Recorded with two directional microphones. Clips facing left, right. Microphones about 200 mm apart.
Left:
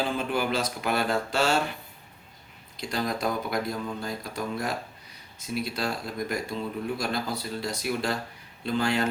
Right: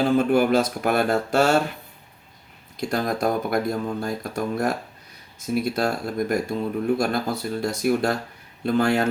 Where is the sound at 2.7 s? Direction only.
50° right (ahead or behind).